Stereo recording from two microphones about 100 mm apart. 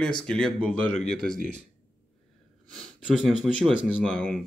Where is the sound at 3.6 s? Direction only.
10° left (ahead or behind).